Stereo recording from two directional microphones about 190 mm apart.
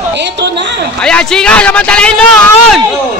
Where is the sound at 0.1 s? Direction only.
65° right (ahead or behind).